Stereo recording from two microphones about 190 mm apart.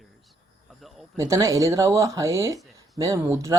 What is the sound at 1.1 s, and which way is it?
Speech, 15° right (ahead or behind).